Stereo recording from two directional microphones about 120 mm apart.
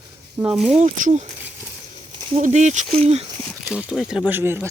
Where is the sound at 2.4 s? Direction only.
80° right.